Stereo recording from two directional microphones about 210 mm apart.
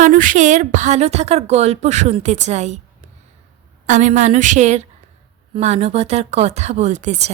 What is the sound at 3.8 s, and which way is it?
Speech, 35° right (ahead or behind).